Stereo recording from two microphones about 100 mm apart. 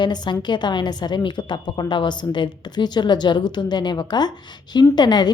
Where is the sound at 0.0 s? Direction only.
45° left (ahead or behind).